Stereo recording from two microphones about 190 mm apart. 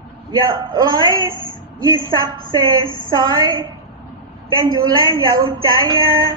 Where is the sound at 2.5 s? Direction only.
25° right (ahead or behind).